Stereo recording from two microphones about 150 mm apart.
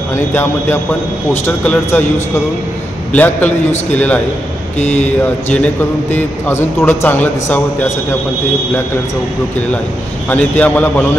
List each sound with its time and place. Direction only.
0.3 s a man's voice: 15° left (ahead or behind)
3.1 s a man's voice: 10° left (ahead or behind)
4.7 s speech: 45° left (ahead or behind)
6.1 s a man's voice: 15° left (ahead or behind)
10.6 s a man's voice: 10° left (ahead or behind)